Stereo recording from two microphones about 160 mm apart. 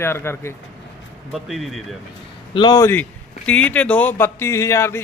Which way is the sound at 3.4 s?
10° left (ahead or behind).